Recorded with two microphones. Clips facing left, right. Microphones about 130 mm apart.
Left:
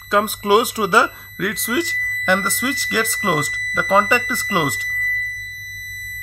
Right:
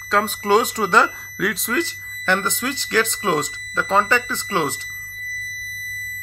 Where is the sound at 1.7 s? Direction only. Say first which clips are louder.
Left 2 dB; 10° left (ahead or behind).